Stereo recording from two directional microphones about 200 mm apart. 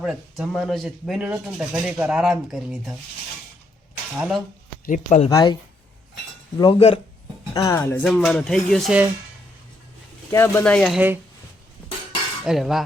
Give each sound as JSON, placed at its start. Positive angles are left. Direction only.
{"t": 0.0, "sound": "speech", "side_deg": -5}
{"t": 4.2, "sound": "speech", "side_deg": 0}
{"t": 4.9, "sound": "speech", "side_deg": 35}
{"t": 5.3, "sound": "speech", "side_deg": 20}
{"t": 6.6, "sound": "speech", "side_deg": 25}
{"t": 7.5, "sound": "speech", "side_deg": 15}
{"t": 10.3, "sound": "speech", "side_deg": 10}
{"t": 12.5, "sound": "speech", "side_deg": 0}